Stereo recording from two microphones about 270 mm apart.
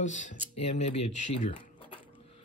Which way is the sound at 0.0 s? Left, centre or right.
Left.